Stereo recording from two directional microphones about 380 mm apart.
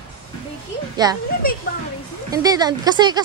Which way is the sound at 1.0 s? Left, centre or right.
Centre.